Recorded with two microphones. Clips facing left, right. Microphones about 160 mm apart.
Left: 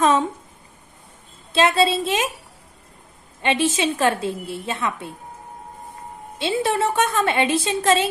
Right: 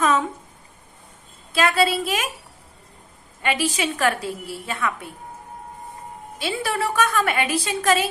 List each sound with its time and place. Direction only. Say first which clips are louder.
1.5 s a woman's voice: left 2 dB; 25° left (ahead or behind)
3.4 s a woman's voice: left 3 dB; 25° left (ahead or behind)
6.3 s a woman's voice: left 4 dB; 25° left (ahead or behind)